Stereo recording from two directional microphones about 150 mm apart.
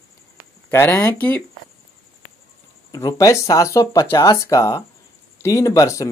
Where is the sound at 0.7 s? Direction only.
15° left (ahead or behind).